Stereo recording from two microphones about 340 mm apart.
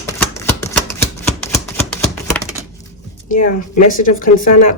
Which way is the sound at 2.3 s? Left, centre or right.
Centre.